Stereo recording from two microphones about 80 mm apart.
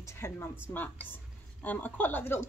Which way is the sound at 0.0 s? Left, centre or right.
Left.